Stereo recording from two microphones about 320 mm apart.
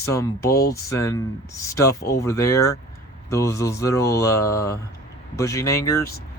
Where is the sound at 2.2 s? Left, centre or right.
Centre.